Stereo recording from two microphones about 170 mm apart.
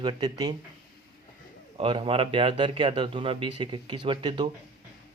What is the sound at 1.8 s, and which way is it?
Speech, 30° right (ahead or behind).